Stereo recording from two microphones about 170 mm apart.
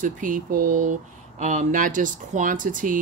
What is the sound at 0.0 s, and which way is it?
Speech, 50° right (ahead or behind).